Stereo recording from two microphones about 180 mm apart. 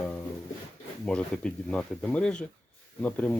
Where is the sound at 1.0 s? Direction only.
5° left (ahead or behind).